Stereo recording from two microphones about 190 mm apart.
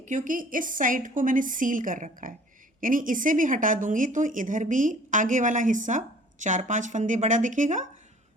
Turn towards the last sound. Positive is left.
turn(degrees=-40)  # may be behind; listen again after turning